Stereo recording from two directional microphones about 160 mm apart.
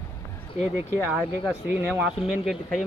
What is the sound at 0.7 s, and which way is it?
Speech, 10° right (ahead or behind).